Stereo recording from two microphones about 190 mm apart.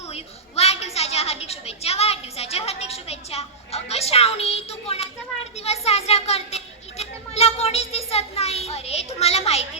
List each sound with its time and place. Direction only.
0.1 s a woman's voice: 35° left (ahead or behind)